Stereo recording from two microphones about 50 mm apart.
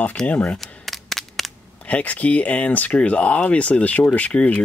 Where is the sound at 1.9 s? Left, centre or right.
Left.